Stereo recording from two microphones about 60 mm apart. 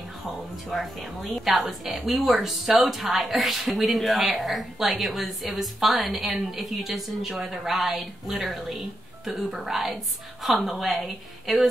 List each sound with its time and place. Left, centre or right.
0.7 s a woman's voice: centre